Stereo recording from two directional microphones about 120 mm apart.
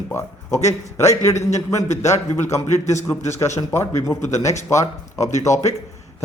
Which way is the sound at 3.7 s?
20° left (ahead or behind).